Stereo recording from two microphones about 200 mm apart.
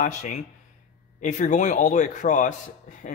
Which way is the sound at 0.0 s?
40° left (ahead or behind).